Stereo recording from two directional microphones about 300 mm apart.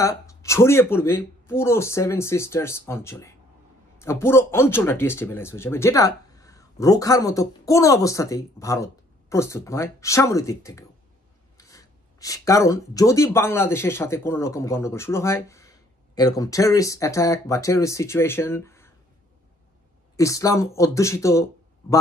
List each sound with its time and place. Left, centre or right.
0.0 s speech: centre
20.2 s speech: centre